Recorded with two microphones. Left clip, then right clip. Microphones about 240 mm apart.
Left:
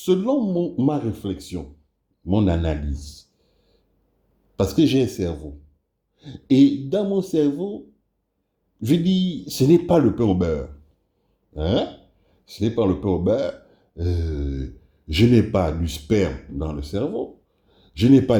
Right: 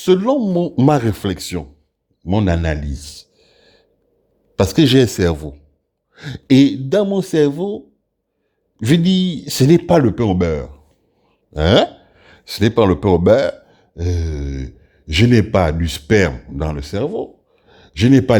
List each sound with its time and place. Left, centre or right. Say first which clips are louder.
0.0 s a man's voice: right 6 dB; right
3.3 s a sound: right 13 dB; right
4.7 s a man's voice: right 6 dB; right
6.6 s a man's voice: right 4 dB; right
8.8 s a man's voice: right 5 dB; right
11.5 s a sound: right 10 dB; right
12.5 s a man's voice: right 7 dB; right